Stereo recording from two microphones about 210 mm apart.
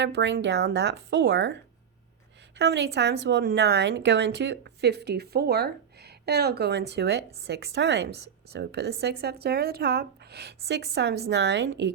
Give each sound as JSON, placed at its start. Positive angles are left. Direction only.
{"t": 0.0, "sound": "speech", "side_deg": -55}
{"t": 2.6, "sound": "a woman's voice", "side_deg": -55}